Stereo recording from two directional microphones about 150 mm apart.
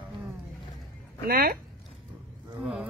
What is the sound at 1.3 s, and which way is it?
Speech, 85° right.